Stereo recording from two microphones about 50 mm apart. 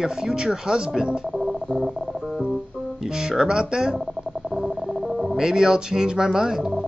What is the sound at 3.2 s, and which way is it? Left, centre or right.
Speech, centre.